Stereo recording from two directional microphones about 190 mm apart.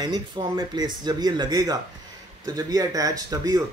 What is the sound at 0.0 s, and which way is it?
Speech, 20° right (ahead or behind).